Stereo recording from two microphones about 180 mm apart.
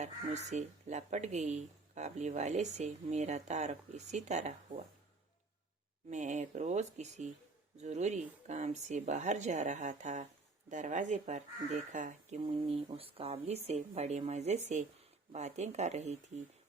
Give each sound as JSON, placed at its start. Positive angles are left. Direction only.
{"t": 0.0, "sound": "speech", "side_deg": -40}
{"t": 6.1, "sound": "speech", "side_deg": -40}